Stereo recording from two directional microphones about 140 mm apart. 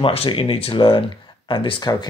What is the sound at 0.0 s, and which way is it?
Speech, 40° left (ahead or behind).